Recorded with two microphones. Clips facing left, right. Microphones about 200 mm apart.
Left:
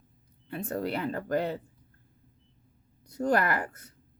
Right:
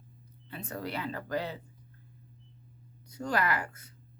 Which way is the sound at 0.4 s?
50° left (ahead or behind).